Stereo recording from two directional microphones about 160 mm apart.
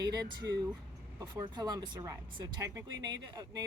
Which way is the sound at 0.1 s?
25° right (ahead or behind).